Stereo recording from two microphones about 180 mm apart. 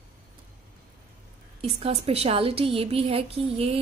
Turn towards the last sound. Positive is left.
turn(degrees=-30)  # may be behind; listen again after turning